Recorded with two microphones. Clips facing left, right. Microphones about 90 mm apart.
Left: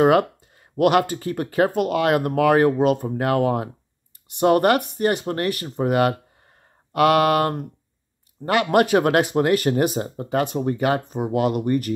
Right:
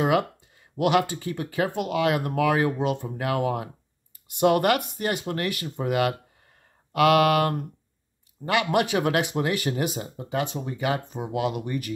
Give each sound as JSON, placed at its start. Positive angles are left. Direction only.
{"t": 0.0, "sound": "speech", "side_deg": 45}